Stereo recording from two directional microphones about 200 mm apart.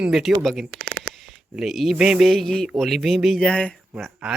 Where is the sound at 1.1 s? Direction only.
90° right.